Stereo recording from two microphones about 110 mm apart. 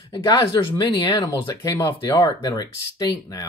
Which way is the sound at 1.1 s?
30° left (ahead or behind).